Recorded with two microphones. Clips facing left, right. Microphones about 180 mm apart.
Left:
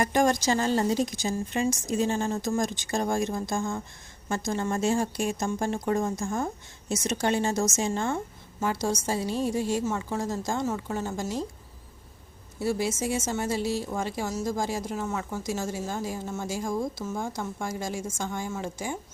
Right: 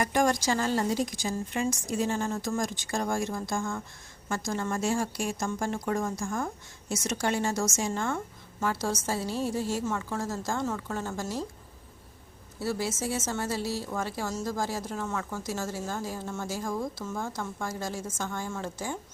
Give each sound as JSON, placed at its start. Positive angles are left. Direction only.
{"t": 0.0, "sound": "a woman's voice", "side_deg": 25}
{"t": 12.5, "sound": "a woman's voice", "side_deg": 15}